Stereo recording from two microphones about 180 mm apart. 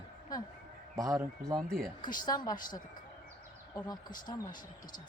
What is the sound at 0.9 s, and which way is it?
Speech, 15° right (ahead or behind).